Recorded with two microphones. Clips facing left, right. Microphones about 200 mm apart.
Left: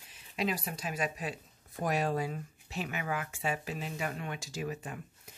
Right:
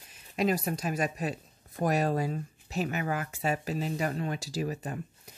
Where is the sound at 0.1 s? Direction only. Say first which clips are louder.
Right 6 dB; 45° right (ahead or behind).